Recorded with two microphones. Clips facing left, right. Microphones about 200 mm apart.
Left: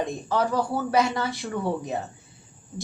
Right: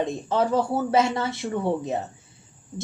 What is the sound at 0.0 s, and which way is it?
A woman's voice, 25° right (ahead or behind).